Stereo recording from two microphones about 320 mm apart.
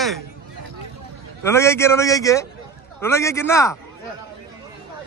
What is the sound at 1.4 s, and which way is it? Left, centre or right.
Speech, centre.